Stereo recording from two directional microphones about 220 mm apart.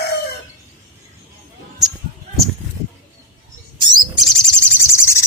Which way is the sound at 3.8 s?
20° right (ahead or behind).